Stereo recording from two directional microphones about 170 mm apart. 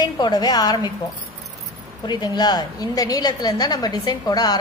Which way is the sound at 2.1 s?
25° left (ahead or behind).